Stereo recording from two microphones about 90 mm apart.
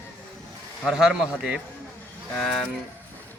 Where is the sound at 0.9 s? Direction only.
5° right (ahead or behind).